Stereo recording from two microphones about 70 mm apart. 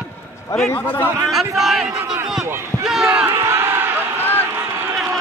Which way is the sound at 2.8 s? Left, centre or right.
Centre.